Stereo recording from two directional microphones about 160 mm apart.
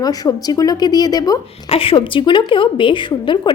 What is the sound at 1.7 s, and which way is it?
A woman's voice, 35° left (ahead or behind).